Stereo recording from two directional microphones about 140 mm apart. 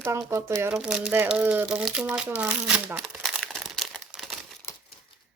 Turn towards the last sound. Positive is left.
turn(degrees=0)  # may be behind; listen again after turning